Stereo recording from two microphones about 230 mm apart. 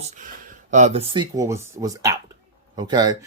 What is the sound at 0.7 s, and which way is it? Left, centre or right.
Speech, right.